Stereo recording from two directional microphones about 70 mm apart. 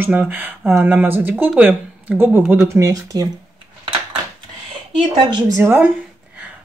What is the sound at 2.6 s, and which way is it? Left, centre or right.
Speech, right.